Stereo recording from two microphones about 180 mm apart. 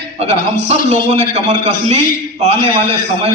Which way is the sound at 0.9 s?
40° right (ahead or behind).